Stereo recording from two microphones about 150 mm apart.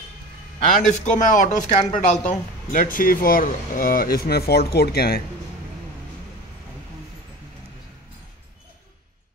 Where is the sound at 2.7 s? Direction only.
65° left (ahead or behind); by 5.2 s 90° left.